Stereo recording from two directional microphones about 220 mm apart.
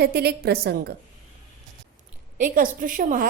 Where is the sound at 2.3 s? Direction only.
40° right (ahead or behind).